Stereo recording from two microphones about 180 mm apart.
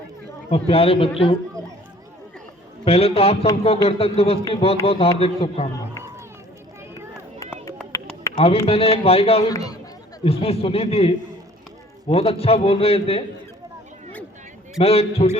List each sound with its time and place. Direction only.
0.5 s a man's voice: 30° left (ahead or behind)
2.8 s a man's voice: 35° left (ahead or behind)
8.4 s a man's voice: 35° left (ahead or behind)
9.5 s speech: 20° left (ahead or behind)
10.2 s a man's voice: 35° left (ahead or behind)
14.8 s a man's voice: 35° left (ahead or behind)